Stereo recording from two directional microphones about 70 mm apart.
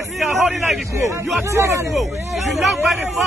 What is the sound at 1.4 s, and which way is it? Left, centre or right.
Speech, right.